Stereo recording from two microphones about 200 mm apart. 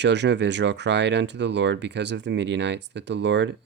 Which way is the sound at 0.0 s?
60° right (ahead or behind).